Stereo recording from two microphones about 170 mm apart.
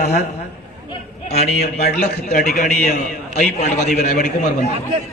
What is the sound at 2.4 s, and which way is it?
A man's voice, 45° left (ahead or behind).